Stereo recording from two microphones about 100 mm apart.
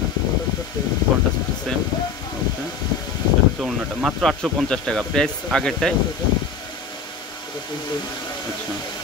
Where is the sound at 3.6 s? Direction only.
Centre (ahead or behind).